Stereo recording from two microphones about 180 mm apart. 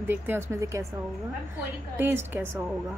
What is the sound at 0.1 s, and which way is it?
Speech, 15° right (ahead or behind).